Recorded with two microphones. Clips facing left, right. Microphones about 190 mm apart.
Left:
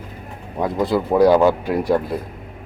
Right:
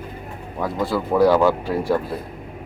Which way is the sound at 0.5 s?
20° left (ahead or behind).